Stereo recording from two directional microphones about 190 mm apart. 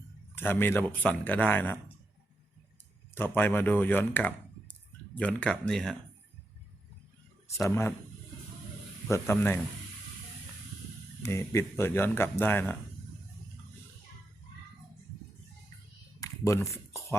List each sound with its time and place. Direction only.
0.3 s speech: 10° left (ahead or behind)
3.2 s speech: 10° left (ahead or behind)
7.5 s speech: 15° left (ahead or behind)
9.0 s speech: 15° left (ahead or behind)
11.2 s speech: 15° left (ahead or behind)
16.2 s a sound: 15° left (ahead or behind)